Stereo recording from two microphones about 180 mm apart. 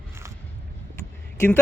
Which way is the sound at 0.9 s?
10° left (ahead or behind).